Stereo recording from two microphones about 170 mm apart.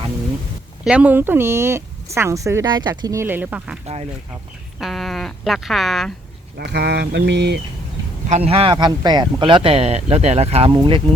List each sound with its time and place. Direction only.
0.9 s speech: 10° right (ahead or behind)
4.8 s speech: centre (ahead or behind)
6.6 s mantra: 80° right
8.3 s speech: 35° right (ahead or behind)